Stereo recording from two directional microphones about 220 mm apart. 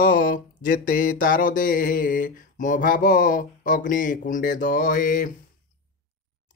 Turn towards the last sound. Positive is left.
turn(degrees=40)  # may be behind; listen again after turning